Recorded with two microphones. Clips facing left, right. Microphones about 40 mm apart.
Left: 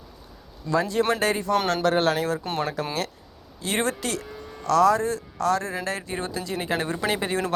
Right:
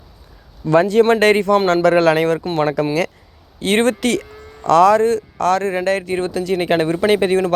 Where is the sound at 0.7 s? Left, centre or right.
Right.